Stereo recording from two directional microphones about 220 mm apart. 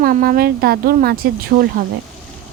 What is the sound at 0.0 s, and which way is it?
Speech, 40° right (ahead or behind).